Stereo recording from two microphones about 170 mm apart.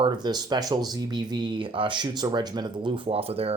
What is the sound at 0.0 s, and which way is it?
Speech, 25° right (ahead or behind).